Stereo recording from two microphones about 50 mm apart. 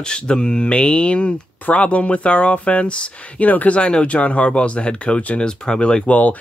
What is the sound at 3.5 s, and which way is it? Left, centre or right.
Speech, left.